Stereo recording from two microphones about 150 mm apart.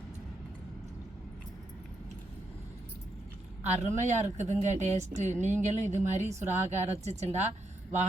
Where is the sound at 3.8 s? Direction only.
50° right (ahead or behind).